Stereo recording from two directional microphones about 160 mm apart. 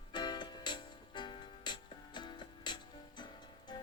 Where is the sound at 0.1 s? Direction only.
30° left (ahead or behind).